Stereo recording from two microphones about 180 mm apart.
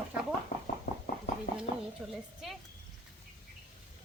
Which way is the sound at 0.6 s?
50° left (ahead or behind).